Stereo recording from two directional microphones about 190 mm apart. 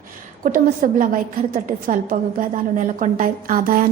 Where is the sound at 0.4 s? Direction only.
45° right (ahead or behind).